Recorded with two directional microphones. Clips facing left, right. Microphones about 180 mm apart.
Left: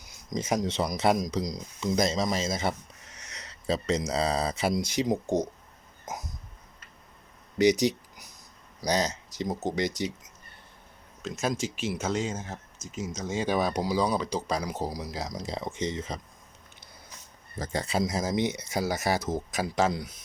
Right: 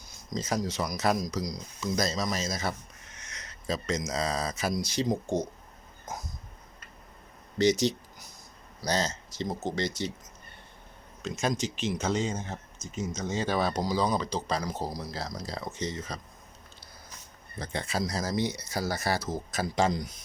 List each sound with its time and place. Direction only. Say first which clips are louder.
0.3 s speech: left 2 dB; 20° left (ahead or behind)
7.6 s speech: left 2 dB; 15° left (ahead or behind)
11.2 s speech: even; centre (ahead or behind); by 16.2 s 20° left (ahead or behind)
17.6 s speech: left 3 dB; 40° left (ahead or behind)
17.9 s speech: left 2 dB; 20° left (ahead or behind)
19.7 s speech: even; 5° left (ahead or behind)